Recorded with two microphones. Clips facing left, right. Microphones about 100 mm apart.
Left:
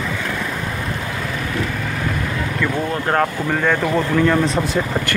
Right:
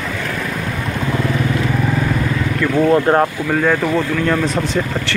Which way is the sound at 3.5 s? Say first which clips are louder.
Right 3 dB; centre (ahead or behind).